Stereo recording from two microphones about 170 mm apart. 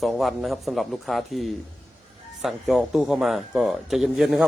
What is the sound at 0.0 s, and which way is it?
Speech, centre (ahead or behind).